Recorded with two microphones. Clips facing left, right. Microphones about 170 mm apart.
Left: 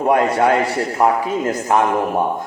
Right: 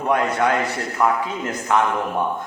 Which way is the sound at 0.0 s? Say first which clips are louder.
Left 5 dB; 35° left (ahead or behind).